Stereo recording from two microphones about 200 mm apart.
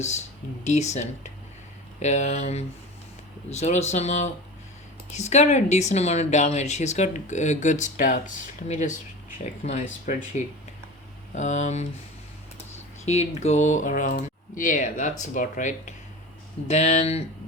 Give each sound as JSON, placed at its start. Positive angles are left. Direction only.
{"t": 0.6, "sound": "speech", "side_deg": 35}
{"t": 13.1, "sound": "speech", "side_deg": 35}